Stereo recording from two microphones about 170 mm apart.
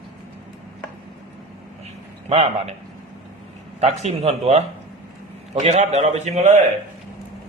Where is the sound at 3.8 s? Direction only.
40° right (ahead or behind).